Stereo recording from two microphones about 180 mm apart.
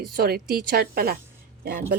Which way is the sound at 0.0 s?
60° right (ahead or behind).